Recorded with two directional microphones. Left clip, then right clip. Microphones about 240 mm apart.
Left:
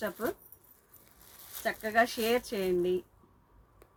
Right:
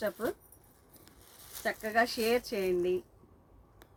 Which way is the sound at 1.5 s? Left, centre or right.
Centre.